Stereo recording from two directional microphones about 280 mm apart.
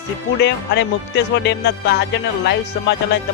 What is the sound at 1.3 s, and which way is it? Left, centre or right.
Speech, left.